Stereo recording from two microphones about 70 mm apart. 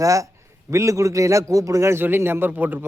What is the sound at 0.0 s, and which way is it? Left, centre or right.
A man's voice, right.